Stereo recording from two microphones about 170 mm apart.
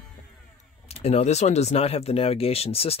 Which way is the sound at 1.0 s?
40° left (ahead or behind).